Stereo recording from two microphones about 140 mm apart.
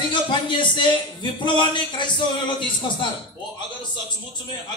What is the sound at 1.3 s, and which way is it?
A man's voice, 35° left (ahead or behind).